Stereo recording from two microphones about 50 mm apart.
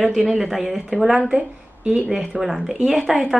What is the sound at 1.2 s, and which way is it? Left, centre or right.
Speech, right.